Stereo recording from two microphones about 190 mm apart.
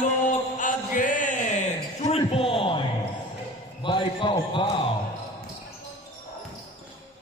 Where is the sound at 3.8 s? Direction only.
25° left (ahead or behind).